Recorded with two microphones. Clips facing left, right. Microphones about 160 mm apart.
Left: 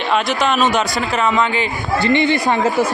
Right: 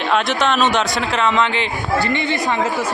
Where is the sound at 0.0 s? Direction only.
Centre (ahead or behind).